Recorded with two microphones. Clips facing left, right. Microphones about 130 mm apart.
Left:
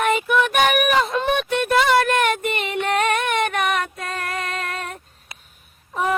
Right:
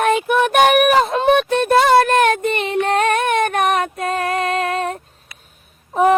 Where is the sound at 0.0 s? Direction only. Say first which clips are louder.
Right 4 dB; 55° right (ahead or behind).